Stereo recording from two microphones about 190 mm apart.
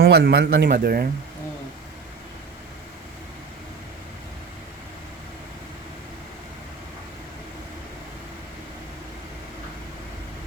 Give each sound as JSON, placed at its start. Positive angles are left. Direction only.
{"t": 0.0, "sound": "a man's voice", "side_deg": -60}